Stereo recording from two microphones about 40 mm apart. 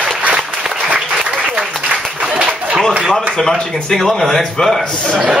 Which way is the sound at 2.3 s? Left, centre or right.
Right.